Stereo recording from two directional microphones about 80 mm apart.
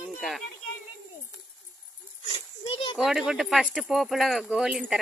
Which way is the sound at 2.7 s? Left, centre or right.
Left.